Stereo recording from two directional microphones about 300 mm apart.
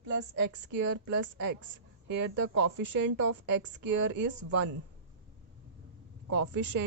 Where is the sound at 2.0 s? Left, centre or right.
Right.